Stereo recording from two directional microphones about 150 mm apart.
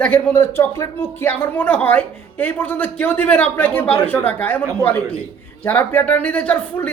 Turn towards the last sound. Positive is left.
turn(degrees=10)  # may be behind; listen again after turning